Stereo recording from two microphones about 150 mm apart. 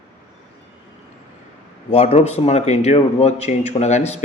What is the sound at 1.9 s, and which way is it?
A man's voice, 45° left (ahead or behind).